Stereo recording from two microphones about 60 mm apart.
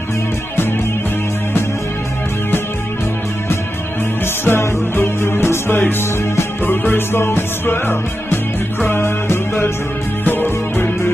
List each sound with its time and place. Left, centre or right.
4.5 s music: left